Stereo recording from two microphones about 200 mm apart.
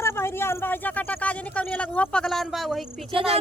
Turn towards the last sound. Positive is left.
turn(degrees=-25)  # may be behind; listen again after turning